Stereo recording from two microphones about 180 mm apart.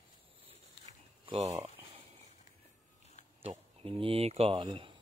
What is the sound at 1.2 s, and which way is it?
Speech, 30° right (ahead or behind).